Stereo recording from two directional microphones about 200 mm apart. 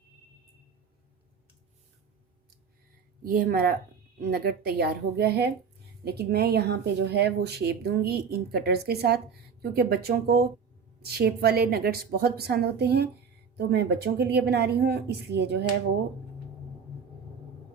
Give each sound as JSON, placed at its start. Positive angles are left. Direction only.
{"t": 3.2, "sound": "speech", "side_deg": -50}